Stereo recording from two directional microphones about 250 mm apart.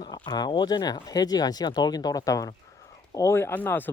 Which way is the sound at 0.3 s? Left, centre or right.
Centre.